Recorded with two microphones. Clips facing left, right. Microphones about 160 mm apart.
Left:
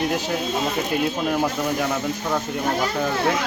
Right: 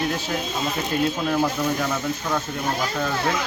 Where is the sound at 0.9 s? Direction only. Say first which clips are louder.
Right 3 dB; 10° left (ahead or behind).